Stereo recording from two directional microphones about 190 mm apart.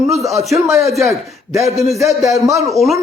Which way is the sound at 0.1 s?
Centre (ahead or behind).